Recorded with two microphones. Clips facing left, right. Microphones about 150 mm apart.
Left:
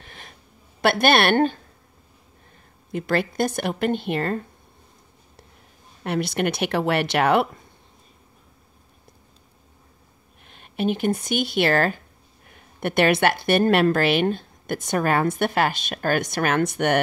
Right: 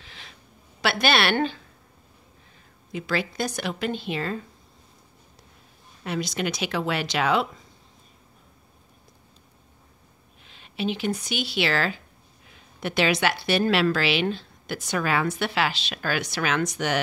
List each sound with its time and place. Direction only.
0.0 s a sound: 50° left (ahead or behind)
2.9 s speech: 55° left (ahead or behind)
6.0 s speech: 60° left (ahead or behind)
10.4 s a woman's voice: 55° left (ahead or behind)